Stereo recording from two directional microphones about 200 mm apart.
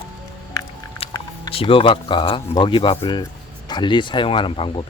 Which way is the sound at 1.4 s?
25° left (ahead or behind).